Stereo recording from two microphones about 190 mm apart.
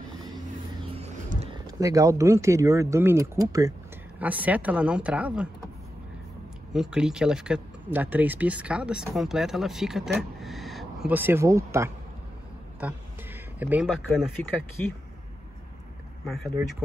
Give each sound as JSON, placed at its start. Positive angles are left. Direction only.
{"t": 0.9, "sound": "vehicle", "side_deg": -35}
{"t": 1.8, "sound": "speech", "side_deg": -15}
{"t": 6.7, "sound": "speech", "side_deg": -5}
{"t": 13.6, "sound": "speech", "side_deg": -10}